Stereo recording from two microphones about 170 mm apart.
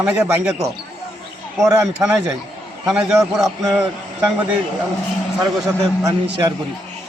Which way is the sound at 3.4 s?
20° right (ahead or behind).